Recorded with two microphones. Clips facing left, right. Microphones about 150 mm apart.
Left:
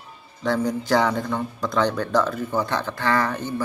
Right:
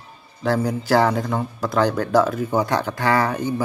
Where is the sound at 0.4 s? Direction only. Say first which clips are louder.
Right 2 dB; 5° right (ahead or behind).